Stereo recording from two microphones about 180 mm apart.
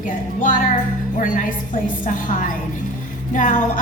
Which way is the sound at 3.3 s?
45° left (ahead or behind).